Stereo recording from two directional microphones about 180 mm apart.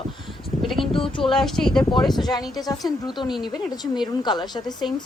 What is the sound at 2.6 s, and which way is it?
A woman's voice, 20° left (ahead or behind).